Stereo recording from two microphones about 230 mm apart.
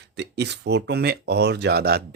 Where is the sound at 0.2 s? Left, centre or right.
Right.